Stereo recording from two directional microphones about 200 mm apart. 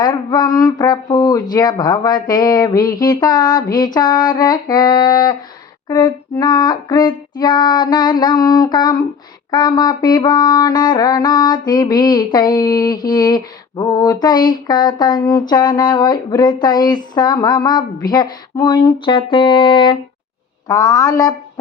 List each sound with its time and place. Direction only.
0.0 s music: 20° left (ahead or behind)
20.7 s a woman's voice: 20° left (ahead or behind)